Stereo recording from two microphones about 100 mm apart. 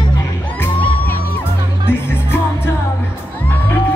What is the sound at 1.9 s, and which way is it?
Music, 25° left (ahead or behind).